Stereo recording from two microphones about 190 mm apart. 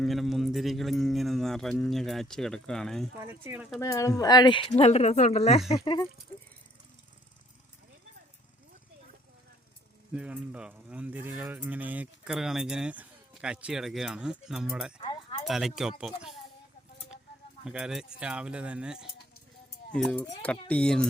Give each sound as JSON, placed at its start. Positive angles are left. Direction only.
{"t": 0.0, "sound": "speech", "side_deg": 0}
{"t": 3.2, "sound": "speech", "side_deg": -10}
{"t": 3.8, "sound": "a woman's voice", "side_deg": 15}
{"t": 10.1, "sound": "speech", "side_deg": -5}
{"t": 15.0, "sound": "a sound", "side_deg": 30}
{"t": 15.4, "sound": "speech", "side_deg": 0}
{"t": 17.7, "sound": "speech", "side_deg": -5}